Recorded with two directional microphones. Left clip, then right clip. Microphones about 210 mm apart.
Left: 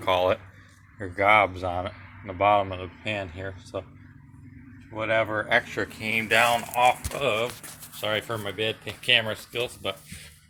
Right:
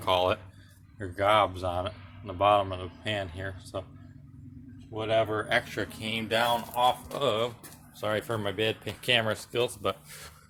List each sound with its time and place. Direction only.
0.0 s speech: centre (ahead or behind)
4.9 s speech: 5° left (ahead or behind)
6.7 s speech: 5° left (ahead or behind)
8.0 s speech: 5° right (ahead or behind)
8.4 s speech: 25° right (ahead or behind)